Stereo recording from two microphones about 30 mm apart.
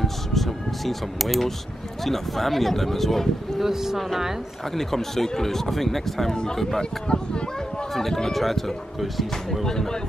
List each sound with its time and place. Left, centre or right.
0.0 s speech: centre
3.6 s speech: centre
4.7 s speech: centre
6.3 s speech: left
7.9 s speech: centre
9.7 s speech: centre